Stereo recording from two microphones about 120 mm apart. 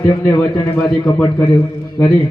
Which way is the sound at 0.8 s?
10° left (ahead or behind).